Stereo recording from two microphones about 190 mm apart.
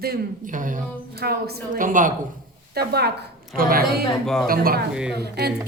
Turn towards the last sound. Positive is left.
turn(degrees=-55)  # may be behind; listen again after turning